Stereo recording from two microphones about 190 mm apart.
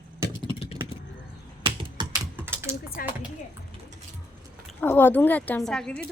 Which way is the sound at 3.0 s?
50° left (ahead or behind).